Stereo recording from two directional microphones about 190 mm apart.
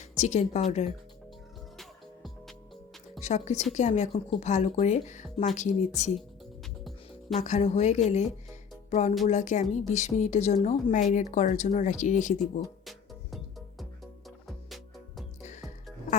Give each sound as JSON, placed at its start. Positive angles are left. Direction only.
{"t": 0.2, "sound": "speech", "side_deg": 35}
{"t": 1.8, "sound": "music", "side_deg": 0}
{"t": 3.2, "sound": "speech", "side_deg": 35}
{"t": 7.3, "sound": "speech", "side_deg": 35}
{"t": 8.9, "sound": "music", "side_deg": 35}
{"t": 9.2, "sound": "speech", "side_deg": 40}
{"t": 12.8, "sound": "music", "side_deg": 0}